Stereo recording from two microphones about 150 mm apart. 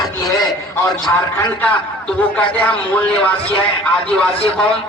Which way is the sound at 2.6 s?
10° left (ahead or behind).